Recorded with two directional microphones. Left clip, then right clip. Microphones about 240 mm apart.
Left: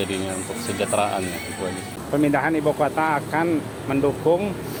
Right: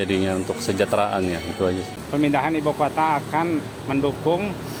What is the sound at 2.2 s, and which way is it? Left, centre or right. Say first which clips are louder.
Speech: even; centre.